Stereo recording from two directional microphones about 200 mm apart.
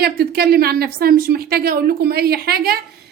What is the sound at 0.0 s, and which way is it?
A woman's voice, 50° right (ahead or behind).